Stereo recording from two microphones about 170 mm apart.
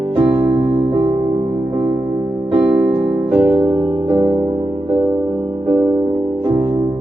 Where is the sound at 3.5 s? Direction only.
30° right (ahead or behind).